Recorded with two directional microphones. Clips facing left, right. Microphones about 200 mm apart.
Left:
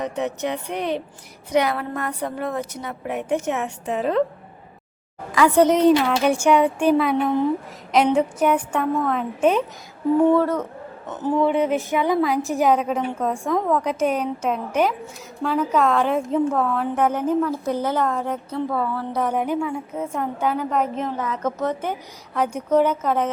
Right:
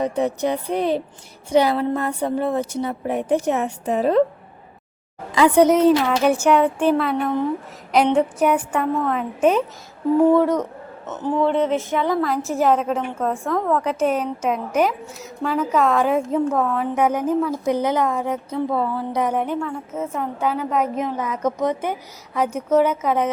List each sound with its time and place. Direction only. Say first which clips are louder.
0.0 s a woman's voice: right 4 dB; 35° right (ahead or behind)
5.3 s a woman's voice: right 2 dB; 20° right (ahead or behind); by 9.6 s 5° right (ahead or behind)
10.2 s a woman's voice: right 2 dB; 15° right (ahead or behind)
11.1 s speech: even; 10° left (ahead or behind)
12.2 s a woman's voice: even; centre (ahead or behind); by 19.3 s 20° right (ahead or behind)
19.3 s a woman's voice: even; 5° left (ahead or behind)
19.9 s a woman's voice: even; 5° right (ahead or behind)